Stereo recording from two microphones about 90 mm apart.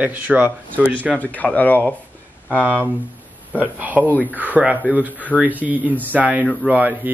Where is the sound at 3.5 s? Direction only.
20° right (ahead or behind).